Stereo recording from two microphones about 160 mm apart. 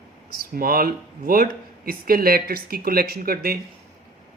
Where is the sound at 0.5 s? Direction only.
65° right (ahead or behind).